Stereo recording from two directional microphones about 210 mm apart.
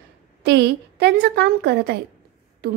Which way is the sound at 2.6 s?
50° right (ahead or behind).